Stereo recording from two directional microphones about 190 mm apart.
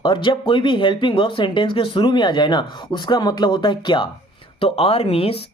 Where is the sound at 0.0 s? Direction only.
25° left (ahead or behind).